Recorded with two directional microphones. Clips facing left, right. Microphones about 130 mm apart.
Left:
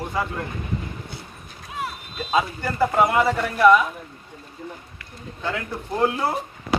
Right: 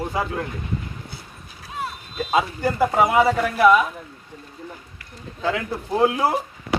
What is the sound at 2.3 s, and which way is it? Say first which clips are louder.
A man's voice: right 2 dB; 15° right (ahead or behind).